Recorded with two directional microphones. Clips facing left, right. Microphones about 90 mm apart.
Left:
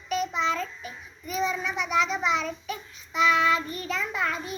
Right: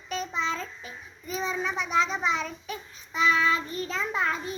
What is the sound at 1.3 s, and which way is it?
A child's voice, 35° right (ahead or behind).